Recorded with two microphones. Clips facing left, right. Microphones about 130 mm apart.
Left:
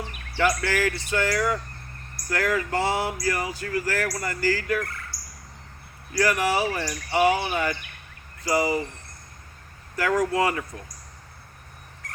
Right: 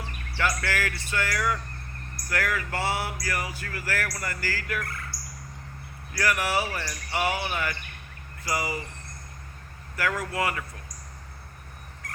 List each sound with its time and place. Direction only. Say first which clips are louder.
0.3 s speech: left 5 dB; 20° left (ahead or behind)
6.1 s speech: left 4 dB; 20° left (ahead or behind)
10.0 s speech: left 6 dB; 20° left (ahead or behind)